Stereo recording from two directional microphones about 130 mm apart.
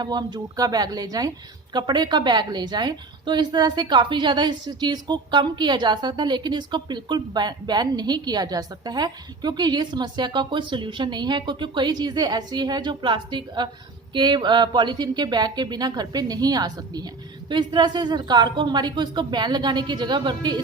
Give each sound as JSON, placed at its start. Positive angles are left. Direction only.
{"t": 0.0, "sound": "a woman's voice", "side_deg": -35}